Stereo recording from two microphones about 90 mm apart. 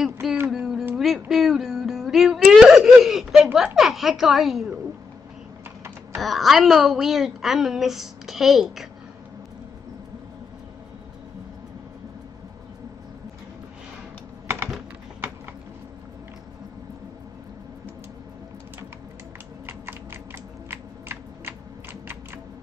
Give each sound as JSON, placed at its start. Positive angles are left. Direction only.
{"t": 0.0, "sound": "a woman's voice", "side_deg": -5}
{"t": 0.5, "sound": "a sound", "side_deg": -5}
{"t": 1.3, "sound": "wail", "side_deg": -5}
{"t": 3.7, "sound": "a woman's voice", "side_deg": 0}
{"t": 6.1, "sound": "a woman's voice", "side_deg": 0}
{"t": 19.6, "sound": "typing", "side_deg": -25}
{"t": 20.7, "sound": "a sound", "side_deg": -25}